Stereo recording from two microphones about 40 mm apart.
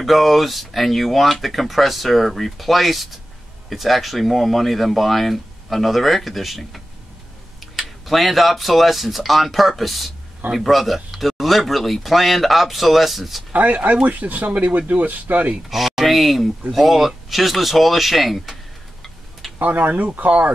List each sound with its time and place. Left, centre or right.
0.0 s speech: centre
13.5 s speech: right
15.7 s speech: centre
19.6 s speech: right